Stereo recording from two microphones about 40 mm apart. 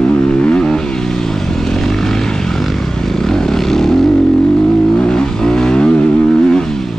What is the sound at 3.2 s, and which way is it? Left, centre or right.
Vehicle, centre.